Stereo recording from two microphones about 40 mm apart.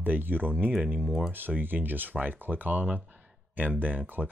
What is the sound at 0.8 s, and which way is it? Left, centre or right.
Speech, right.